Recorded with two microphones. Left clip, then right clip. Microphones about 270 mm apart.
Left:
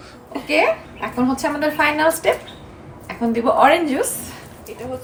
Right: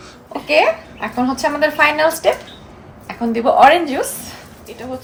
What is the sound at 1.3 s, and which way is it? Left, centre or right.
A woman's voice, right.